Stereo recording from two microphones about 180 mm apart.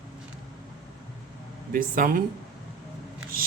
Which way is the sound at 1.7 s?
50° right (ahead or behind).